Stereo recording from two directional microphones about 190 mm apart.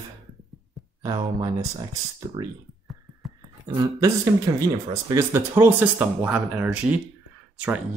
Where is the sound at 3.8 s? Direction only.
20° right (ahead or behind).